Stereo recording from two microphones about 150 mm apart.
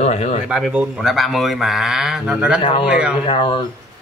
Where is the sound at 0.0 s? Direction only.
50° left (ahead or behind).